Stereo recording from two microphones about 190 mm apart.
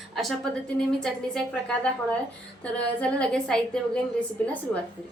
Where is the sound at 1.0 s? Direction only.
5° left (ahead or behind).